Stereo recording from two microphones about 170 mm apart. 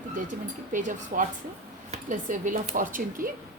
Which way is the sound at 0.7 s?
50° right (ahead or behind).